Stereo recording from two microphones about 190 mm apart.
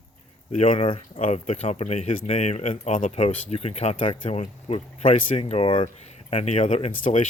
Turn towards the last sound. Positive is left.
turn(degrees=40)  # may be behind; listen again after turning